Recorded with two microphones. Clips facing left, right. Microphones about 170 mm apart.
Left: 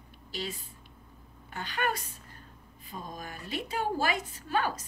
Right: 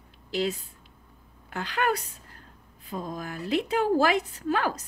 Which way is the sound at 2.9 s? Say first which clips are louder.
Right 7 dB; 75° right (ahead or behind).